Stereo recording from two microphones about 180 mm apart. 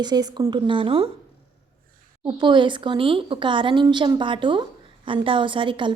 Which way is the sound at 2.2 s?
25° right (ahead or behind).